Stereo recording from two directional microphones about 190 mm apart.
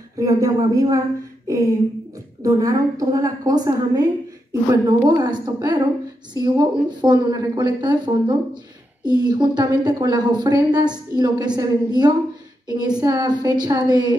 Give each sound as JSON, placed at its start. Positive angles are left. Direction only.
{"t": 0.2, "sound": "speech", "side_deg": -20}
{"t": 2.4, "sound": "a woman's voice", "side_deg": -20}